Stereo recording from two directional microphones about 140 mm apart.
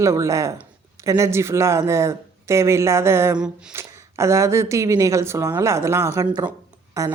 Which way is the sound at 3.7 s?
20° right (ahead or behind).